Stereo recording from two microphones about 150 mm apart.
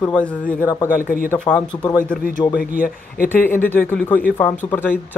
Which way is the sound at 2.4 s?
20° left (ahead or behind).